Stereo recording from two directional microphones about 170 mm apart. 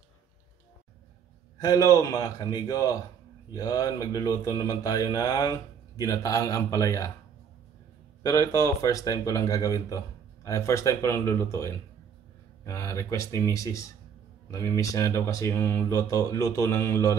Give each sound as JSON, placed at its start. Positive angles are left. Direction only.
{"t": 1.6, "sound": "speech", "side_deg": 20}
{"t": 8.2, "sound": "speech", "side_deg": 20}